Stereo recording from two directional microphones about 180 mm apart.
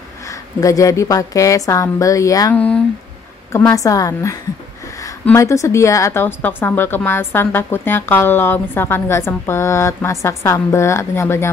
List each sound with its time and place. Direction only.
0.3 s a woman's voice: 20° left (ahead or behind)
2.5 s a woman's voice: 5° left (ahead or behind)